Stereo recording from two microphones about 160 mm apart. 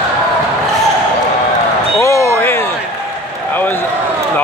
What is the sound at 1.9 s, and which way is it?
Basketball bounce, 20° left (ahead or behind).